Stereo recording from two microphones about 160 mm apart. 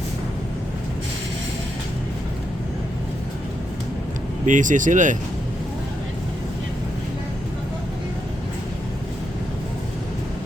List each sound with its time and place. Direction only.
4.4 s speech: 50° right (ahead or behind)